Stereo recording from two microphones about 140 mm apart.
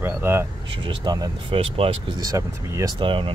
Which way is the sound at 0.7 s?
35° right (ahead or behind).